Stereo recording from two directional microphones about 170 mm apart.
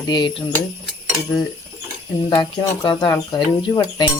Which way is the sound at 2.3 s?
25° left (ahead or behind).